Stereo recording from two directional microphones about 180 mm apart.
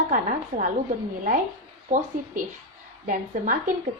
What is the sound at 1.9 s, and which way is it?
A woman's voice, 45° right (ahead or behind).